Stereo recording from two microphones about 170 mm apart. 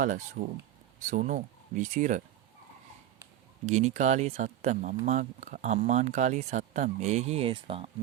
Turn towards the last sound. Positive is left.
turn(degrees=-30)  # may be behind; listen again after turning